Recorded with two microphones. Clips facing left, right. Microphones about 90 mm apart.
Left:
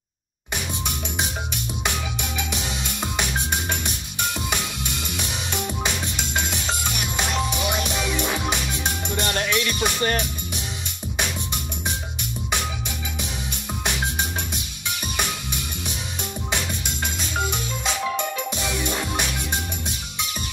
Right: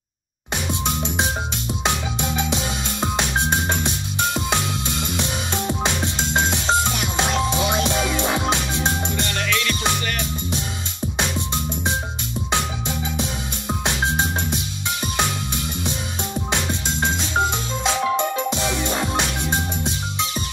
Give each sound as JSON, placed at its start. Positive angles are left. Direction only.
{"t": 0.8, "sound": "music", "side_deg": -25}
{"t": 9.3, "sound": "music", "side_deg": 25}
{"t": 11.1, "sound": "music", "side_deg": -20}
{"t": 16.5, "sound": "organ", "side_deg": -25}